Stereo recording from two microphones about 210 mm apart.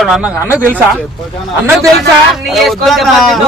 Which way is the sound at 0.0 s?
Centre (ahead or behind).